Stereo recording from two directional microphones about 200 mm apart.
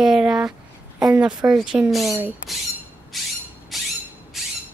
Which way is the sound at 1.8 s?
Centre (ahead or behind).